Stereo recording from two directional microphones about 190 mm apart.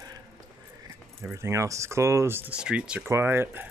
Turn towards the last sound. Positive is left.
turn(degrees=-10)  # may be behind; listen again after turning